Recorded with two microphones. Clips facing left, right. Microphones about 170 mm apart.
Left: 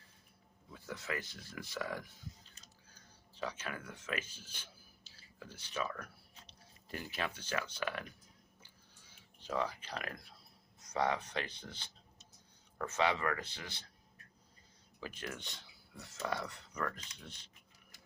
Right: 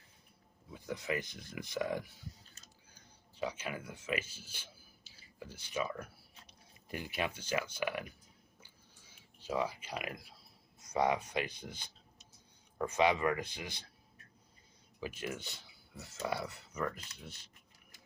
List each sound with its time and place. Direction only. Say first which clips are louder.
0.7 s speech: right 4 dB; 15° right (ahead or behind)
3.3 s speech: right 3 dB; 10° right (ahead or behind)
9.4 s speech: right 2 dB; 10° right (ahead or behind)
15.0 s speech: right 4 dB; 10° right (ahead or behind)